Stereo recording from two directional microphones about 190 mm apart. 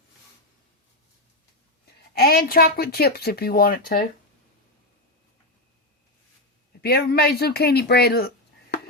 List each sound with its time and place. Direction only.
2.1 s speech: 55° left (ahead or behind)
6.8 s speech: 55° left (ahead or behind)